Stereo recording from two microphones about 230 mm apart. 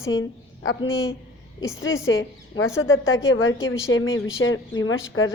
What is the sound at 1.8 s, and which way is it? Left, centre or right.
A woman's voice, left.